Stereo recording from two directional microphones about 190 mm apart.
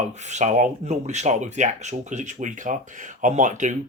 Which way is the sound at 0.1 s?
40° right (ahead or behind).